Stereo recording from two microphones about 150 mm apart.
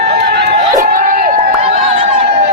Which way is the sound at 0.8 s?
65° right (ahead or behind).